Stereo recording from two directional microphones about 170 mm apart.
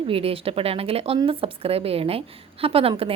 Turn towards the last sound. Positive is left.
turn(degrees=-35)  # may be behind; listen again after turning